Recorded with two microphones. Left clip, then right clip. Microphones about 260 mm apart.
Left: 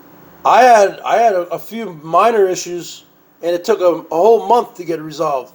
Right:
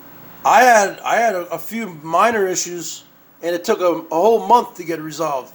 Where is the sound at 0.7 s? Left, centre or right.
Right.